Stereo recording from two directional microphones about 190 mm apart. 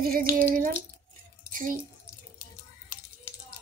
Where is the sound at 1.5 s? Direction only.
45° right (ahead or behind).